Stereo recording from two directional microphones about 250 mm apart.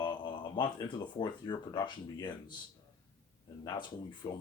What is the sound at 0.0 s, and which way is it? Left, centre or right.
Speech, centre.